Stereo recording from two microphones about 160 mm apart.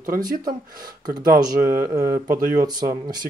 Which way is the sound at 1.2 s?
60° right (ahead or behind).